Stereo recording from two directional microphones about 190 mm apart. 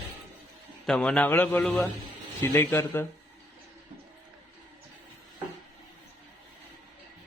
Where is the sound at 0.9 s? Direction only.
5° left (ahead or behind).